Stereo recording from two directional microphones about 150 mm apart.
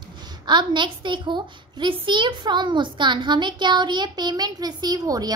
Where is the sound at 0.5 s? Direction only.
30° right (ahead or behind).